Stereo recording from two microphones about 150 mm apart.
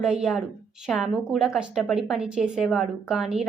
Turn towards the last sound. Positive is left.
turn(degrees=-5)  # may be behind; listen again after turning